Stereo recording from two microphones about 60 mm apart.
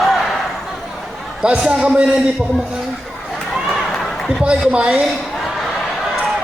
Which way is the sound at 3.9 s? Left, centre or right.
Centre.